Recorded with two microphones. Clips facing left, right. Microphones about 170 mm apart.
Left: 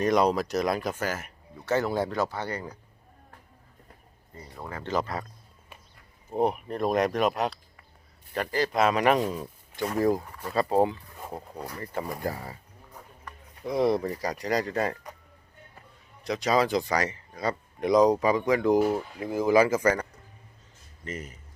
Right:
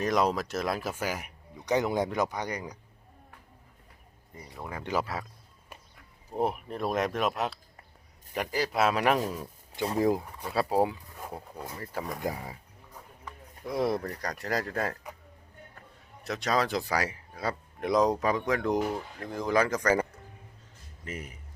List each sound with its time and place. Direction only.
0.0 s speech: centre (ahead or behind)
4.5 s speech: 10° right (ahead or behind)
9.7 s speech: 25° right (ahead or behind)
10.0 s speech: 15° right (ahead or behind)
12.3 s speech: 10° right (ahead or behind)
13.2 s speech: centre (ahead or behind)
16.2 s speech: centre (ahead or behind)
21.0 s speech: 10° right (ahead or behind)